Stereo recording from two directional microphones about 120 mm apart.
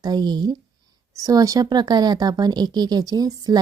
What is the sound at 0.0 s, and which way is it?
Speech, 35° right (ahead or behind).